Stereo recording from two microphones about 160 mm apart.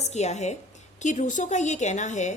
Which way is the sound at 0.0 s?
45° left (ahead or behind).